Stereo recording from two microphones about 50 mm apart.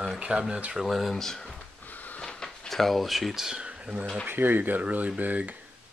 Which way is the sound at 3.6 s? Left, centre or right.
Right.